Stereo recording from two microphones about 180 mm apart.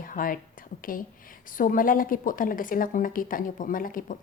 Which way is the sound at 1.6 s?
50° left (ahead or behind).